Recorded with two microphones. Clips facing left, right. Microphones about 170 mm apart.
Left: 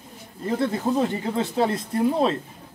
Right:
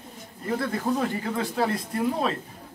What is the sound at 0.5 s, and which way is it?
Speech, 25° left (ahead or behind).